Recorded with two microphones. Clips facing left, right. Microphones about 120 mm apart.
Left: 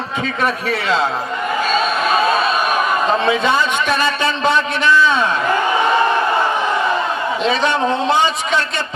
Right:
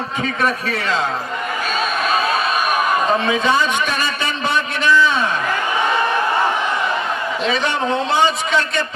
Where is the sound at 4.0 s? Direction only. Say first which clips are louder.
Left 5 dB; 15° right (ahead or behind).